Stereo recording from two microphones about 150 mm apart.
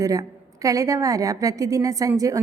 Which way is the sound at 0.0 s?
20° right (ahead or behind).